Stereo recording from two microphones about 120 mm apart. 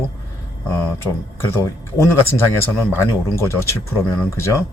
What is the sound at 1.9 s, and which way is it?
Speech, 20° left (ahead or behind).